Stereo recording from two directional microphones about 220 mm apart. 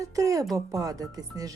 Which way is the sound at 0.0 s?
15° right (ahead or behind).